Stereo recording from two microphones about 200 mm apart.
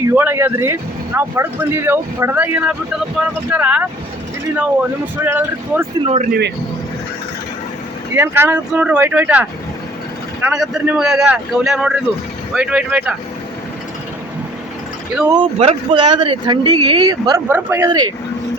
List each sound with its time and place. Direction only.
0.1 s speech: 10° right (ahead or behind)
6.0 s speech: 30° right (ahead or behind)
8.1 s speech: 10° right (ahead or behind)
15.5 s speech: 30° right (ahead or behind)